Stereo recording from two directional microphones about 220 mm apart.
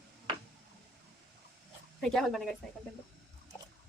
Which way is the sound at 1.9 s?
Centre (ahead or behind).